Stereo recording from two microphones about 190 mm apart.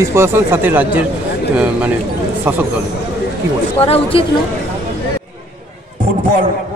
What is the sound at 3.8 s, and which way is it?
Speech, 30° left (ahead or behind).